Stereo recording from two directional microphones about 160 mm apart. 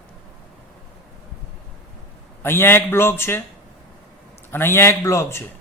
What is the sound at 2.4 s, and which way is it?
A man's voice, 15° left (ahead or behind).